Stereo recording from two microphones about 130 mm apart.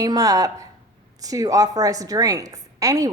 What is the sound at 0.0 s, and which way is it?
A woman's voice, 25° right (ahead or behind).